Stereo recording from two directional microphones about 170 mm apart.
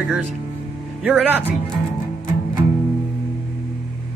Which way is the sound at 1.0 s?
Centre (ahead or behind).